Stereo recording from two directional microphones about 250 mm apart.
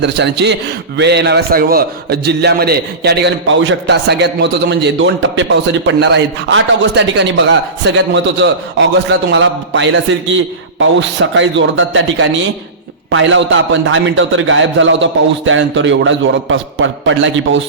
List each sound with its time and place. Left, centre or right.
0.0 s a man's voice: right